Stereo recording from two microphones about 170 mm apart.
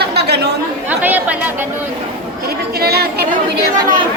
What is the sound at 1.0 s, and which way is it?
Speech, 10° right (ahead or behind).